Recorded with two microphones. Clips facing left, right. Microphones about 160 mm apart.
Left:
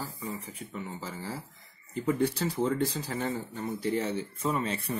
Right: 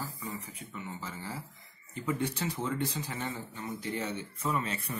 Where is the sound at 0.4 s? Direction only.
35° left (ahead or behind).